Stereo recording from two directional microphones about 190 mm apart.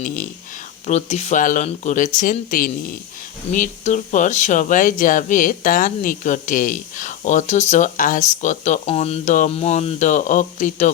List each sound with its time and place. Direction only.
0.9 s speech: 35° left (ahead or behind)